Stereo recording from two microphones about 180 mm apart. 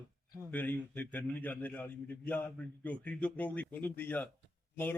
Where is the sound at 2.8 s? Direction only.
10° left (ahead or behind).